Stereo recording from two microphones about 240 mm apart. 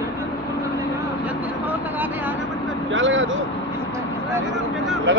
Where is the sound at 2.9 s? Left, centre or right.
Right.